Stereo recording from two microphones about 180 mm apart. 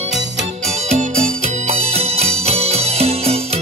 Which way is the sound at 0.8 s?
40° right (ahead or behind).